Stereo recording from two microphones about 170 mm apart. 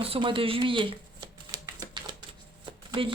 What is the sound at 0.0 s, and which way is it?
Speech, 30° right (ahead or behind).